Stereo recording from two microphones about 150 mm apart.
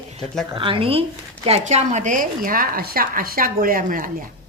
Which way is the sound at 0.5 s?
35° right (ahead or behind).